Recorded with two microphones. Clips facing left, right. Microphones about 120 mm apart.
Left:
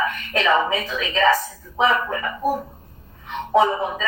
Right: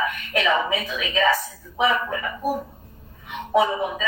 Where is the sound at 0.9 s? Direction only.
40° left (ahead or behind).